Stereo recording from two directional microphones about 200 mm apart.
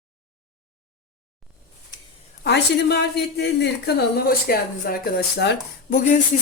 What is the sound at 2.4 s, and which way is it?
Speech, 60° left (ahead or behind).